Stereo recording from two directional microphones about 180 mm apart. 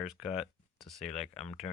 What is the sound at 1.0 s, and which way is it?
Speech, 35° left (ahead or behind).